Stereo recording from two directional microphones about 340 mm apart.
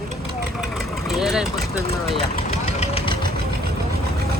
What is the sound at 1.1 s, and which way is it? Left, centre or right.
Speech, centre.